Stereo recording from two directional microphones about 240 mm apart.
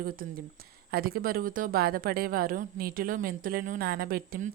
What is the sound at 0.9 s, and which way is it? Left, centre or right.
A woman's voice, right.